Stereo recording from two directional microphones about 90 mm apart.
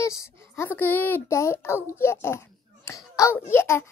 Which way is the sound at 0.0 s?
30° left (ahead or behind).